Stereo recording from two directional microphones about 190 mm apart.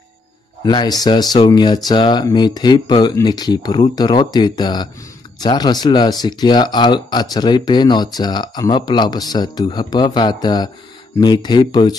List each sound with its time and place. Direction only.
0.7 s speech: 20° left (ahead or behind)